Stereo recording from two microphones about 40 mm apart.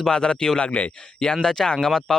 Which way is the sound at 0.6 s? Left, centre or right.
Left.